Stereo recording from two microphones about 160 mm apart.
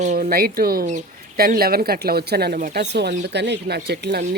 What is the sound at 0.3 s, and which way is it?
Speech, 70° right (ahead or behind).